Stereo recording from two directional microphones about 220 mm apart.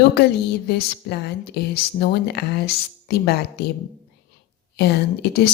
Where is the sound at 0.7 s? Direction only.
45° left (ahead or behind).